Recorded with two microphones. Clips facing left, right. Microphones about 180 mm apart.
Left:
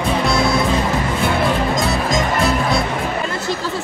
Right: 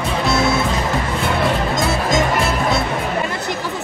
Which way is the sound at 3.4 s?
20° right (ahead or behind).